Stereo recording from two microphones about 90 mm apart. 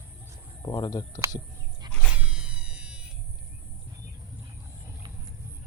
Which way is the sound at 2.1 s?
15° right (ahead or behind).